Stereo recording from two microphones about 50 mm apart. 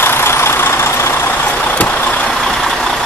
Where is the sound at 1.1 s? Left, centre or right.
Left.